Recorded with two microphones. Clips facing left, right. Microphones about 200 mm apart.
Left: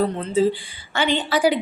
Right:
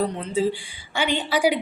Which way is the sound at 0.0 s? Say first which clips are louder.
Left 4 dB; 15° right (ahead or behind).